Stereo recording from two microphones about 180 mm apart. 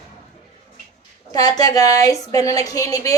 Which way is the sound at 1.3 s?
20° left (ahead or behind).